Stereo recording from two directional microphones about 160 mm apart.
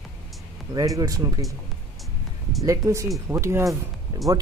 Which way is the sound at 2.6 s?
20° right (ahead or behind).